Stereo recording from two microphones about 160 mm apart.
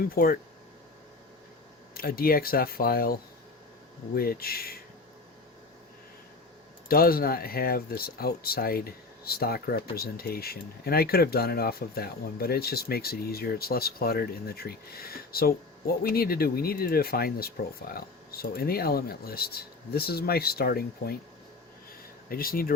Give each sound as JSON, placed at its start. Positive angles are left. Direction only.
{"t": 0.1, "sound": "speech", "side_deg": 65}
{"t": 2.0, "sound": "speech", "side_deg": 65}
{"t": 6.8, "sound": "speech", "side_deg": 70}
{"t": 22.3, "sound": "speech", "side_deg": 65}